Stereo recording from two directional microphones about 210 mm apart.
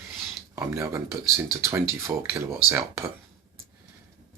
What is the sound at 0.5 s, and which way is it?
Speech, 10° right (ahead or behind).